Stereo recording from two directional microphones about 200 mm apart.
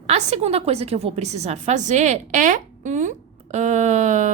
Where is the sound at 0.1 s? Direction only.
30° right (ahead or behind).